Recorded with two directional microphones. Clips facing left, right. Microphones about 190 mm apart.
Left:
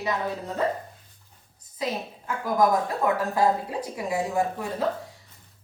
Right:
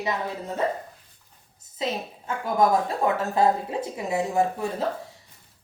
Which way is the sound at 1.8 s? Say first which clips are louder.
Right 1 dB; 25° right (ahead or behind).